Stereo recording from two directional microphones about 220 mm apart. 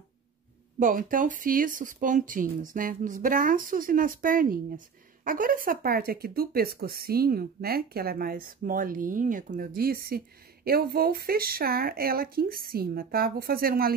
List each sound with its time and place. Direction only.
0.7 s speech: 35° right (ahead or behind)